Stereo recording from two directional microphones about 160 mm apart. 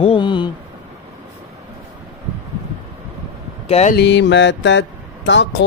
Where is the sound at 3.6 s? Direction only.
40° left (ahead or behind).